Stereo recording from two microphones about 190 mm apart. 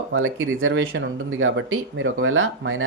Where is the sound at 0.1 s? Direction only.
90° right.